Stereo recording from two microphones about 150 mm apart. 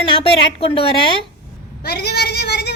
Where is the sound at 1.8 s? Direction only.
90° left.